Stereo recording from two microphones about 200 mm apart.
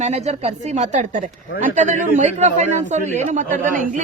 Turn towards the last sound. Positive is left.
turn(degrees=-40)  # may be behind; listen again after turning